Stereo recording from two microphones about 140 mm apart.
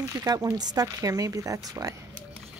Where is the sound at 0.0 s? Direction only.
25° right (ahead or behind).